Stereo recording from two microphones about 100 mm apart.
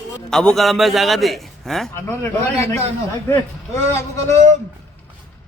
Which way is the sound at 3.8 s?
30° left (ahead or behind).